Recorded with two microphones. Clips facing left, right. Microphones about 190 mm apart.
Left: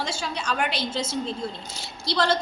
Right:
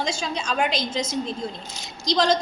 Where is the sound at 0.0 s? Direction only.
20° right (ahead or behind).